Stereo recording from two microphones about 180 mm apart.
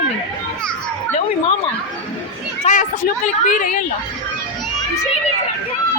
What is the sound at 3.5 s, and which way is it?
Speech, 45° left (ahead or behind).